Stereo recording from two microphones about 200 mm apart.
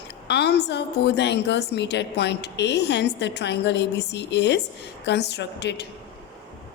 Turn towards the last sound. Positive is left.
turn(degrees=60)  # may be behind; listen again after turning